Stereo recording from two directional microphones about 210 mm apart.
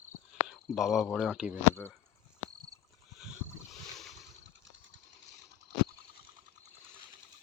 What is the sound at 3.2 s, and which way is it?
Boat, centre (ahead or behind).